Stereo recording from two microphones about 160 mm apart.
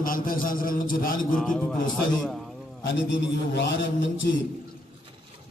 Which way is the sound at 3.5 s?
90° left.